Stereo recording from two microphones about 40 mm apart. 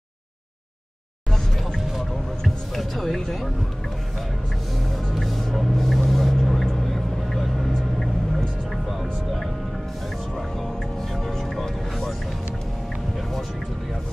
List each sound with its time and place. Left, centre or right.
1.8 s a sound: centre
2.4 s music: centre
4.8 s music: centre
6.9 s vehicle: centre
10.6 s music: centre